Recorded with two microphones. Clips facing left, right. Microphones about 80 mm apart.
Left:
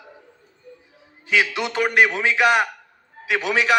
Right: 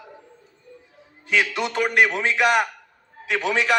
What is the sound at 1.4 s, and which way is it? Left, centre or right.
A man's voice, centre.